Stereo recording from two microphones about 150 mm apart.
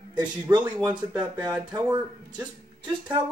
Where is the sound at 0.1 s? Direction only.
30° right (ahead or behind).